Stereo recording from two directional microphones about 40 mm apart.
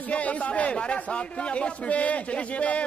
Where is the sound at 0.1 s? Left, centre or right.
Left.